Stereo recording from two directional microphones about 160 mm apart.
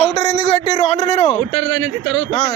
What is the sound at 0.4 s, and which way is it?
Speech, 40° left (ahead or behind).